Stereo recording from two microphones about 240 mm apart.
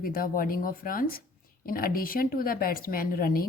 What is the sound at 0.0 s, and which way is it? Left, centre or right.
Speech, left.